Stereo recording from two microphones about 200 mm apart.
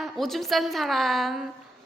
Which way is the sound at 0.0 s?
Centre (ahead or behind).